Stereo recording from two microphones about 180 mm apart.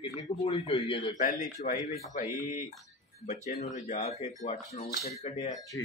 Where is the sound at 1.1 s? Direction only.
50° left (ahead or behind).